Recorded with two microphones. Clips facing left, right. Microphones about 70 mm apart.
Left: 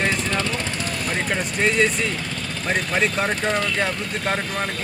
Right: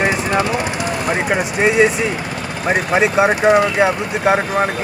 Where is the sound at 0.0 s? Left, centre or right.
Centre.